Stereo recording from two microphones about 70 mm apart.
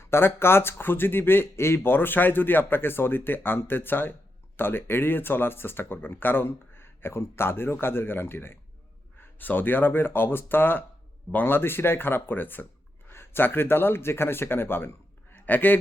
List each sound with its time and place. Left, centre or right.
0.0 s speech: left